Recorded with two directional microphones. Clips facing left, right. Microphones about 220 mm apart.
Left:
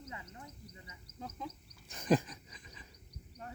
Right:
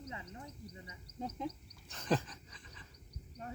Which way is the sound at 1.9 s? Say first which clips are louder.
Left 4 dB; 15° left (ahead or behind).